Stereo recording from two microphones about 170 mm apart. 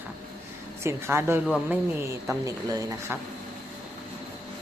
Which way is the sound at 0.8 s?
15° right (ahead or behind).